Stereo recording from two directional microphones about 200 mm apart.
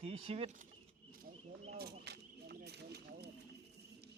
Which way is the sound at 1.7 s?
55° right (ahead or behind).